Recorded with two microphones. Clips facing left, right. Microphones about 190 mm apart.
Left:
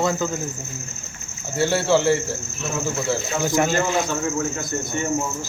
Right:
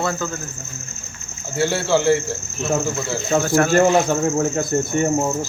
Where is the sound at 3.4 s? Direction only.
20° left (ahead or behind).